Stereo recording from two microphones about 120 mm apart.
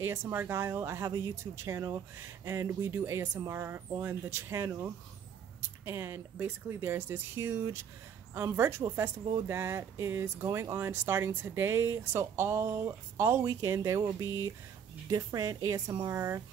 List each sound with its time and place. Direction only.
0.0 s speech: 20° right (ahead or behind)